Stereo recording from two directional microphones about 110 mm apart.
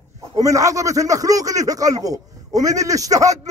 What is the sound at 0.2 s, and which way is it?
A man's voice, 30° right (ahead or behind).